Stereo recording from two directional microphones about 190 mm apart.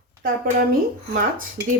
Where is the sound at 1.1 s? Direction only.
50° right (ahead or behind).